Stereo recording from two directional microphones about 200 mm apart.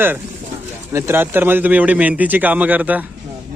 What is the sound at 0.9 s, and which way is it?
Speech, 10° right (ahead or behind).